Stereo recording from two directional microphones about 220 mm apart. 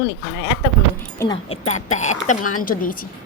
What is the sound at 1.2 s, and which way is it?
Speech, 20° left (ahead or behind).